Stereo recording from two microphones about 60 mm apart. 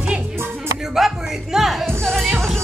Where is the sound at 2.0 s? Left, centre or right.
Centre.